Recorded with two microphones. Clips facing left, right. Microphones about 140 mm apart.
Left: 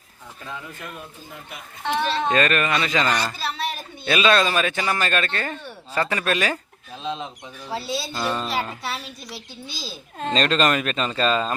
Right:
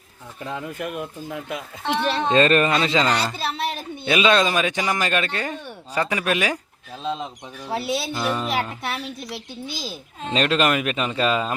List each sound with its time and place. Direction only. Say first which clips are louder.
0.8 s speech: right 8 dB; 75° right (ahead or behind)
1.8 s speech: even; centre (ahead or behind)
2.3 s speech: right 6 dB; 30° right (ahead or behind); by 7.7 s 5° right (ahead or behind)
7.7 s speech: right 3 dB; 20° right (ahead or behind)
10.2 s speech: even; 10° right (ahead or behind)